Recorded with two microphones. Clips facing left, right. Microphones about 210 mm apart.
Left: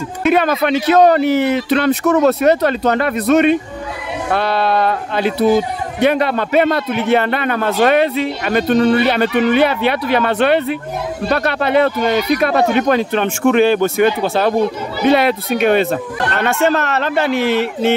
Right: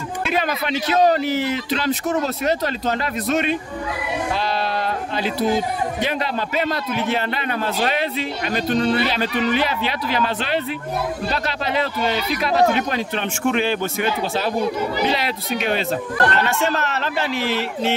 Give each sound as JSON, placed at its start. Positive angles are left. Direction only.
{"t": 0.3, "sound": "a man's voice", "side_deg": 60}